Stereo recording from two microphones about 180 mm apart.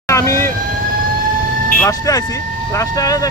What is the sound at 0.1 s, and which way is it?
Vehicle, 15° left (ahead or behind).